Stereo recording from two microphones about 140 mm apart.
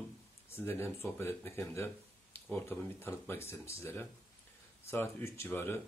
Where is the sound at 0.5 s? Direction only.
15° left (ahead or behind).